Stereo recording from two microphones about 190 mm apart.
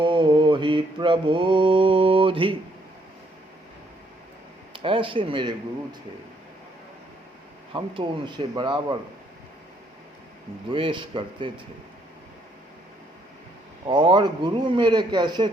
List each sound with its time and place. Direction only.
0.0 s mantra: 25° right (ahead or behind)
4.7 s a man's voice: 25° right (ahead or behind)
7.7 s a man's voice: 25° right (ahead or behind)
10.7 s a man's voice: 25° right (ahead or behind)
13.8 s a man's voice: 25° right (ahead or behind)